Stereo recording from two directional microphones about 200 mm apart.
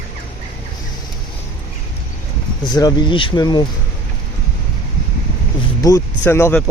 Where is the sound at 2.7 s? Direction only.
20° left (ahead or behind).